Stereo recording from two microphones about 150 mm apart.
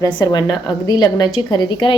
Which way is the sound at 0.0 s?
25° left (ahead or behind).